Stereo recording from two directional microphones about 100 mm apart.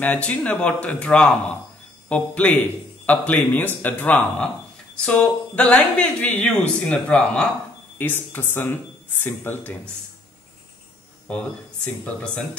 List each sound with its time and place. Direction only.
0.0 s speech: 15° left (ahead or behind)
11.2 s speech: 10° left (ahead or behind)